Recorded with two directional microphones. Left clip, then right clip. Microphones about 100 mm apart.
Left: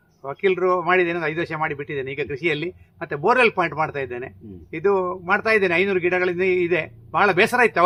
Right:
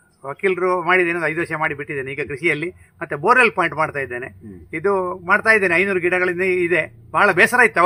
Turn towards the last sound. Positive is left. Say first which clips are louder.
# right 3 dB
turn(degrees=-15)  # may be behind; listen again after turning